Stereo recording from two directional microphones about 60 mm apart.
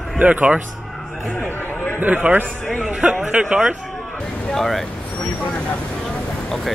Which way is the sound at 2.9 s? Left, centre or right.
Centre.